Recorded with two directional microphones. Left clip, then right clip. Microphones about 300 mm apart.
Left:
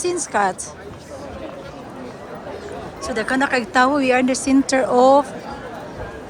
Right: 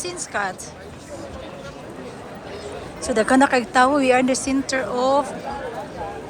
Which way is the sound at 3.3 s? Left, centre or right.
Centre.